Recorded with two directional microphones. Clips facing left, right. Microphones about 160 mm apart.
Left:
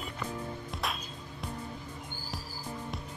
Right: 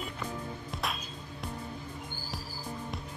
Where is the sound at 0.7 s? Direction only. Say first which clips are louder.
Right 1 dB; centre (ahead or behind).